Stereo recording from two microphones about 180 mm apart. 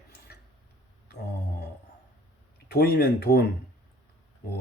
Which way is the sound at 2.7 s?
60° left (ahead or behind).